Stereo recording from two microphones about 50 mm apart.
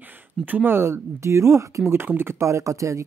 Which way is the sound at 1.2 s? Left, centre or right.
Right.